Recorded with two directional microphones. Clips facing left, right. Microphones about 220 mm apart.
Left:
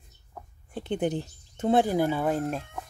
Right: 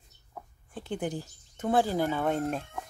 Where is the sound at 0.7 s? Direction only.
20° left (ahead or behind).